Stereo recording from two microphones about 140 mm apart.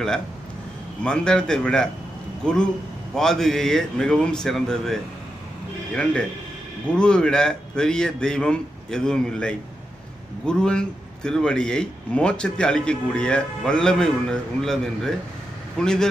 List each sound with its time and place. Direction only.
1.0 s a man's voice: 5° left (ahead or behind)
7.0 s a man's voice: 5° left (ahead or behind)